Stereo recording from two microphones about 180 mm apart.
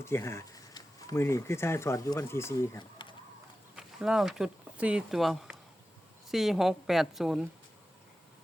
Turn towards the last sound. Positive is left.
turn(degrees=0)  # may be behind; listen again after turning